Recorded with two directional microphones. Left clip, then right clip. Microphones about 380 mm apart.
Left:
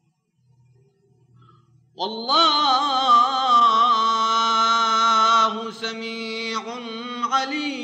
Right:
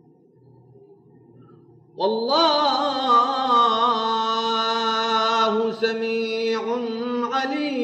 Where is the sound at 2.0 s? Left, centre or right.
Left.